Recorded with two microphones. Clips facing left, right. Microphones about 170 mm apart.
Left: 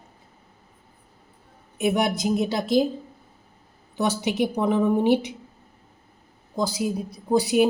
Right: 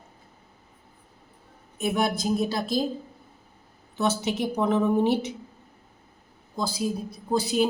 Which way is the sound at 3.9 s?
15° left (ahead or behind).